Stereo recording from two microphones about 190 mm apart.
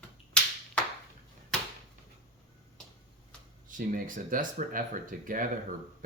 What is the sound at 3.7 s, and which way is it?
Speech, 45° right (ahead or behind).